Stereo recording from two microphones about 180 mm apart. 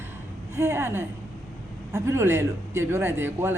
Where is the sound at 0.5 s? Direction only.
15° right (ahead or behind).